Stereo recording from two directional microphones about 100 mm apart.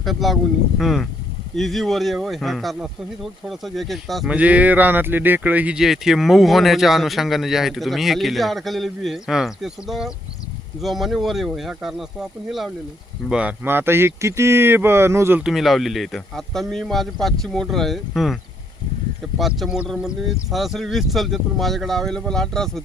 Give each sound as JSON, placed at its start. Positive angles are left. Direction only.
{"t": 0.0, "sound": "speech", "side_deg": 0}
{"t": 4.3, "sound": "speech", "side_deg": -15}
{"t": 5.8, "sound": "speech", "side_deg": 0}
{"t": 13.7, "sound": "speech", "side_deg": -25}
{"t": 15.4, "sound": "speech", "side_deg": -5}
{"t": 19.4, "sound": "speech", "side_deg": 0}